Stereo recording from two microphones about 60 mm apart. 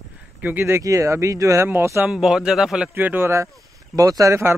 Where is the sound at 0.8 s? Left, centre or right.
Right.